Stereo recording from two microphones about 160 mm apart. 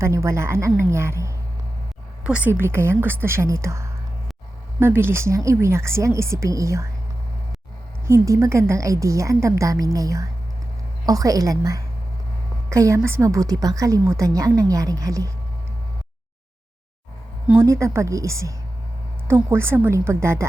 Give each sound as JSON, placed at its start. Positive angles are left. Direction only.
{"t": 0.0, "sound": "a woman's voice", "side_deg": -20}
{"t": 8.0, "sound": "a woman's voice", "side_deg": -20}
{"t": 17.5, "sound": "a woman's voice", "side_deg": -20}